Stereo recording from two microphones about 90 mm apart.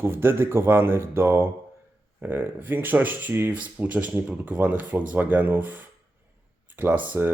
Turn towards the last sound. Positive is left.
turn(degrees=-20)  # may be behind; listen again after turning